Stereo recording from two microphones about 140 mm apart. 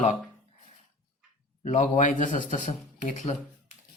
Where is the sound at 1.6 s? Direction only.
60° left (ahead or behind).